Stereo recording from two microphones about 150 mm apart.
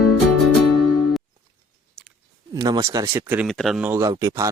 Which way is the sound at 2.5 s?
25° right (ahead or behind).